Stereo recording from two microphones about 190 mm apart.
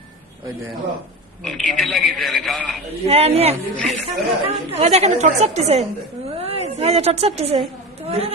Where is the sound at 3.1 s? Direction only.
30° right (ahead or behind).